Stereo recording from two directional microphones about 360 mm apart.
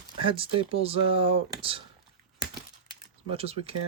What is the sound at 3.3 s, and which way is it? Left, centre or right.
Speech, centre.